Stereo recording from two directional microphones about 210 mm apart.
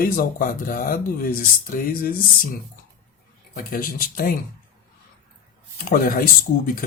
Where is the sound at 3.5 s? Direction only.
45° left (ahead or behind).